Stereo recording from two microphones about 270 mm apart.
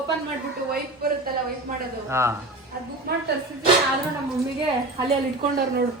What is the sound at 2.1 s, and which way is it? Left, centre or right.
Speech, centre.